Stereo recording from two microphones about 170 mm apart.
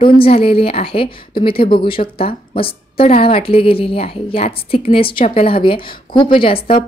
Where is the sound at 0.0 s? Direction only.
35° left (ahead or behind).